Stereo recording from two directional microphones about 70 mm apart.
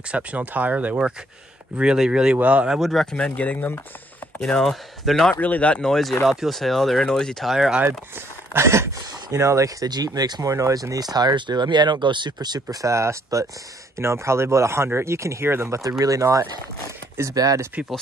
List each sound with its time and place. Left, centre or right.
0.1 s speech: right
2.8 s speech: centre
3.3 s speech: left
4.4 s speech: centre
5.3 s speech: left; by 7.5 s centre
7.5 s speech: centre
8.5 s speech: right
9.8 s speech: right
10.4 s speech: right
10.7 s speech: right